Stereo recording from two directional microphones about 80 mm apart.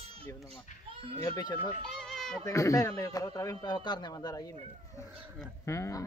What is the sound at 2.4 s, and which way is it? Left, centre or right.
Speech, left.